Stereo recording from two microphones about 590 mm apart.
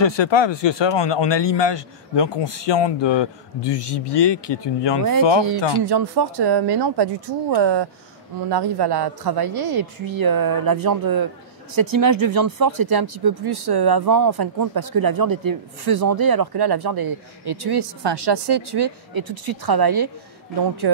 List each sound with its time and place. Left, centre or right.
0.0 s speech: left
5.9 s speech: right